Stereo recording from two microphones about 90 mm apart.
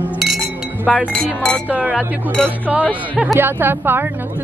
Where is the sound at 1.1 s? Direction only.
10° left (ahead or behind).